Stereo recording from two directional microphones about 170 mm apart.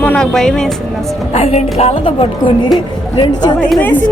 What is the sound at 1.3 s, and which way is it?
A woman's voice, 40° left (ahead or behind).